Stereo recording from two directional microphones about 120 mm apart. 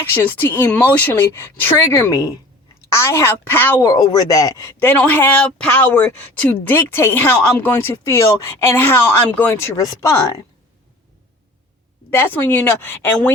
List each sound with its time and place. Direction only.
0.1 s speech: 15° left (ahead or behind)
3.8 s speech: 30° left (ahead or behind)
4.9 s speech: 15° left (ahead or behind)
12.1 s speech: 15° left (ahead or behind)